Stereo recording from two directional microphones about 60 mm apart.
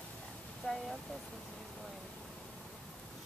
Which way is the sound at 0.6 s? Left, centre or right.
Centre.